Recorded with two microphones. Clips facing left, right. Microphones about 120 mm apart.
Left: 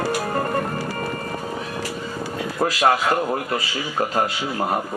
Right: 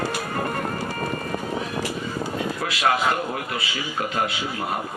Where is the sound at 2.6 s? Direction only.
40° left (ahead or behind).